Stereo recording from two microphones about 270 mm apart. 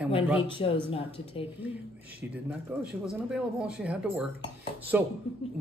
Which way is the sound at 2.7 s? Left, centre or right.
Centre.